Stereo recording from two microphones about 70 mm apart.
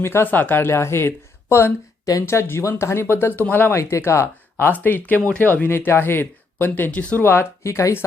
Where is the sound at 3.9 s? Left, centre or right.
Left.